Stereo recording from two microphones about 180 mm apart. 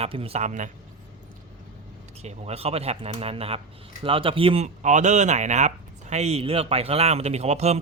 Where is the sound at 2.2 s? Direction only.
35° right (ahead or behind).